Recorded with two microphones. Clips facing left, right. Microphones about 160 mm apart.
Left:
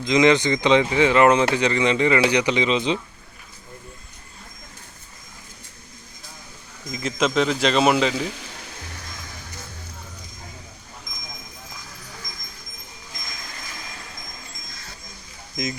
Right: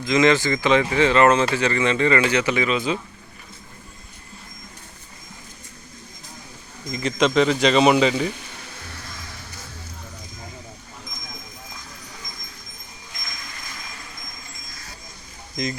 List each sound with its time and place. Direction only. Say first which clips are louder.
0.0 s speech: left 1 dB; 15° left (ahead or behind)
6.9 s speech: right 3 dB; 5° left (ahead or behind)